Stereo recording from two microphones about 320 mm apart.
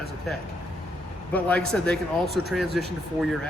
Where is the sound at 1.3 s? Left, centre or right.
Centre.